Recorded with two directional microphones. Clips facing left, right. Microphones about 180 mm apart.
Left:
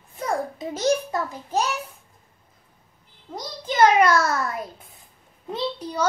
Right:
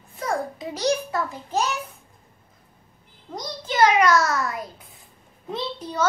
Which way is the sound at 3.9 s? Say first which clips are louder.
Even; 30° left (ahead or behind).